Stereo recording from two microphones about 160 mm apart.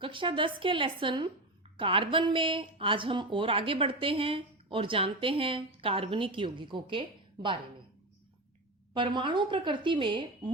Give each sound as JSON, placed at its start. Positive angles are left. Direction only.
{"t": 0.0, "sound": "speech", "side_deg": -30}
{"t": 8.9, "sound": "speech", "side_deg": -30}